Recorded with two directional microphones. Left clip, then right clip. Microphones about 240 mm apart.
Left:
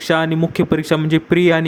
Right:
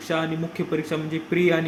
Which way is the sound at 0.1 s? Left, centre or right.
Left.